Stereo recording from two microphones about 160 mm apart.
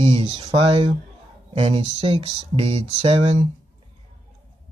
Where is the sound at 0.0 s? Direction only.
30° right (ahead or behind).